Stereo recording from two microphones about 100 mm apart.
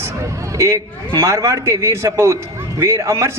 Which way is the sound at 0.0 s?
30° right (ahead or behind).